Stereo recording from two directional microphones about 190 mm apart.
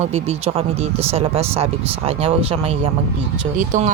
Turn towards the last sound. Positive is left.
turn(degrees=-40)  # may be behind; listen again after turning